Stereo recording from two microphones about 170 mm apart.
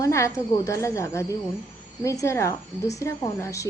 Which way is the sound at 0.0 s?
15° left (ahead or behind).